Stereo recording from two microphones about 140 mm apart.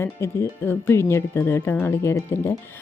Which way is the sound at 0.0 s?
20° left (ahead or behind).